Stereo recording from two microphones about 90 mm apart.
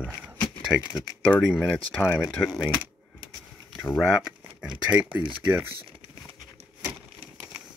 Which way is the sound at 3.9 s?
5° right (ahead or behind).